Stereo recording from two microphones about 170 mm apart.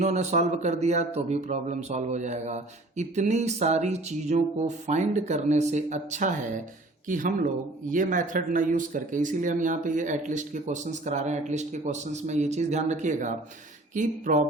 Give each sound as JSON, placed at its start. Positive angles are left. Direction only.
{"t": 0.0, "sound": "speech", "side_deg": -45}